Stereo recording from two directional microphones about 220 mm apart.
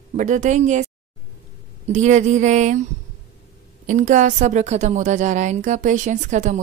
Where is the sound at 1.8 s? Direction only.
30° right (ahead or behind).